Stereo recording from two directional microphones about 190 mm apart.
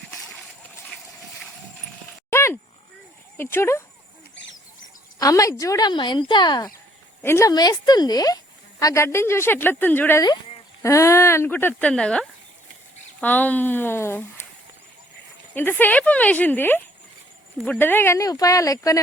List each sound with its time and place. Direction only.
0.1 s splash: centre (ahead or behind)
2.3 s livestock: 15° left (ahead or behind)
3.3 s a woman's voice: 10° left (ahead or behind)
5.2 s a woman's voice: 15° left (ahead or behind)
15.5 s a woman's voice: 10° left (ahead or behind)